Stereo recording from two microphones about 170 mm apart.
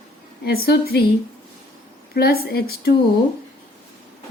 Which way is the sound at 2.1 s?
65° left (ahead or behind).